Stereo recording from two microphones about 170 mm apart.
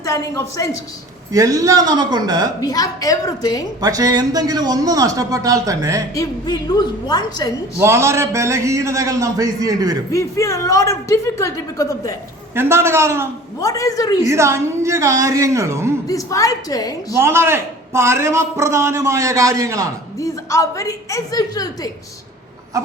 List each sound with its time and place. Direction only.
0.0 s a woman's voice: 20° left (ahead or behind)
1.3 s a man's voice: 20° right (ahead or behind)
2.6 s a woman's voice: 20° left (ahead or behind)
3.8 s a man's voice: 20° right (ahead or behind)
6.1 s a woman's voice: 25° left (ahead or behind)
7.8 s a man's voice: 15° right (ahead or behind)
10.1 s a woman's voice: 20° left (ahead or behind)
12.5 s a man's voice: 15° right (ahead or behind)
13.6 s a woman's voice: 20° left (ahead or behind)
14.3 s a man's voice: 15° right (ahead or behind)
16.0 s a woman's voice: 20° left (ahead or behind)
17.2 s a man's voice: 15° right (ahead or behind)
20.1 s a woman's voice: 20° left (ahead or behind)